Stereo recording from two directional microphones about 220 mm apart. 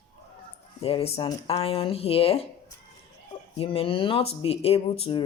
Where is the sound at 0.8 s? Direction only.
25° left (ahead or behind).